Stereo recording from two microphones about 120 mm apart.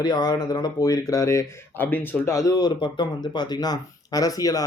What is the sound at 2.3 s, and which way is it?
Speech, 30° left (ahead or behind).